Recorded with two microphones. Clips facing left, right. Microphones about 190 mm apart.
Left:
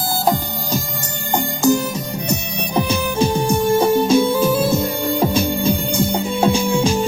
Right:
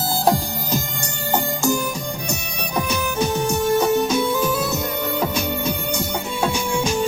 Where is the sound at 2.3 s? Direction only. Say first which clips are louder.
Left 7 dB; 25° left (ahead or behind).